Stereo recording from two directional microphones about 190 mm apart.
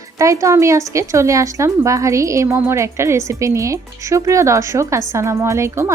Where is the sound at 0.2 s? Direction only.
15° right (ahead or behind).